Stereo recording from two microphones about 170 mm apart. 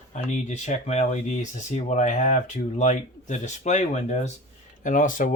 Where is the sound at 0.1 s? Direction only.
45° left (ahead or behind).